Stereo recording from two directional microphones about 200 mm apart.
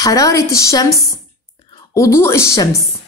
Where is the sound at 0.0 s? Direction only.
15° left (ahead or behind).